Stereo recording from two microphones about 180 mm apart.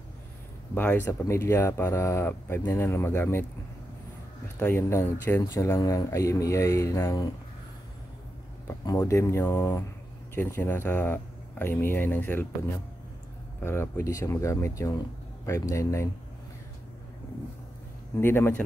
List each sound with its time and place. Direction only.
0.7 s speech: 10° left (ahead or behind)
4.6 s speech: 10° left (ahead or behind)
8.6 s speech: 20° left (ahead or behind)
18.2 s speech: 15° left (ahead or behind)